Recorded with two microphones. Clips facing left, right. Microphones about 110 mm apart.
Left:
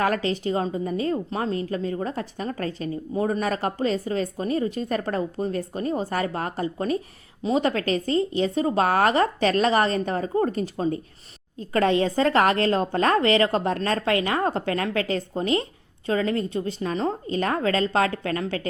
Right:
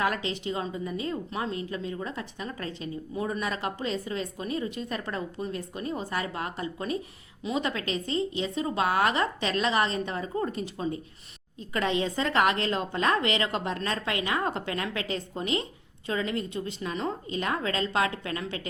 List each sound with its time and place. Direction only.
0.0 s a woman's voice: 45° left (ahead or behind)